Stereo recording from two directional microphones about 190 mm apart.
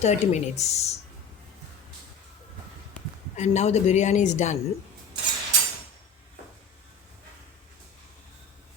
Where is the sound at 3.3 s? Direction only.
35° left (ahead or behind).